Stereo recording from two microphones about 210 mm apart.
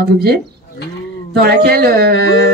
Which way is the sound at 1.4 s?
50° right (ahead or behind).